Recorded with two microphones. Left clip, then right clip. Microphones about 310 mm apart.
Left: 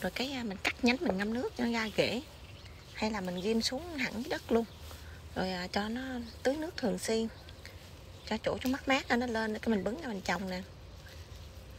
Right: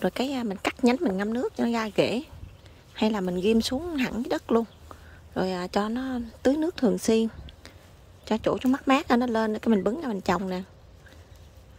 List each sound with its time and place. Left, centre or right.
0.0 s speech: centre